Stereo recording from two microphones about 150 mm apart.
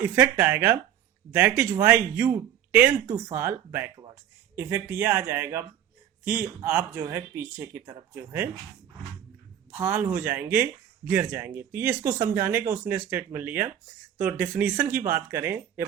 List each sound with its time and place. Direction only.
0.0 s speech: 10° right (ahead or behind)
9.7 s speech: 15° right (ahead or behind)